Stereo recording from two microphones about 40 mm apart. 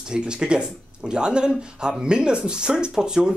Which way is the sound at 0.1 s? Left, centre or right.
Right.